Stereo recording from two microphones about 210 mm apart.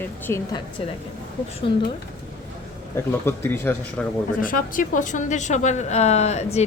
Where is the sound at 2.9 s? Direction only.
10° left (ahead or behind).